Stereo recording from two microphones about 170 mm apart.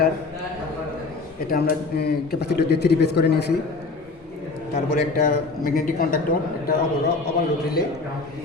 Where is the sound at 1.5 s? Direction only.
60° left (ahead or behind).